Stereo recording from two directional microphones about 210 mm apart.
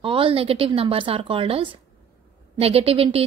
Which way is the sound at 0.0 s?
25° right (ahead or behind).